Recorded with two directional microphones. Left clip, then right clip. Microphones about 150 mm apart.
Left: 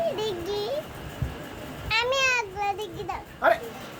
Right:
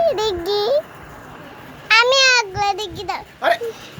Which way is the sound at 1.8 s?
55° right (ahead or behind).